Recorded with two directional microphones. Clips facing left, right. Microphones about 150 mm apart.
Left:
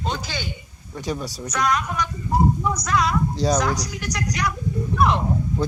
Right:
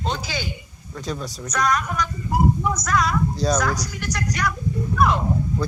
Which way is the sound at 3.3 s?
20° left (ahead or behind).